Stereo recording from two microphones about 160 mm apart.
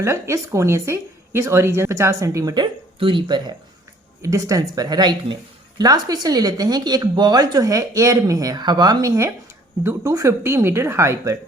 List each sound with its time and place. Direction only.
0.0 s a woman's voice: 20° right (ahead or behind)